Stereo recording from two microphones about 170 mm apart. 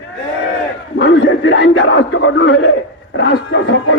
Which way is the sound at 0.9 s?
90° left.